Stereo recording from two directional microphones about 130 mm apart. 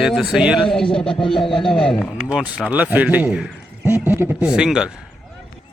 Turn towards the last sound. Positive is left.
turn(degrees=-5)  # may be behind; listen again after turning